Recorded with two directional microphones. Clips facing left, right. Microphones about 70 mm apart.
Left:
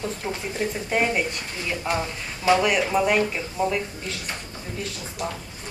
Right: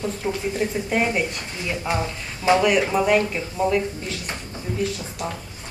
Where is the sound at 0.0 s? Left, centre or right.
Centre.